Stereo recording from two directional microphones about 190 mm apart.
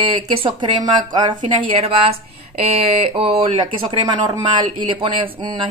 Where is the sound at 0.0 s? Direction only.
30° right (ahead or behind).